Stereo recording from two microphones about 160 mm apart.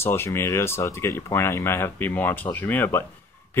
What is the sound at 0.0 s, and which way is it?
Speech, 15° left (ahead or behind).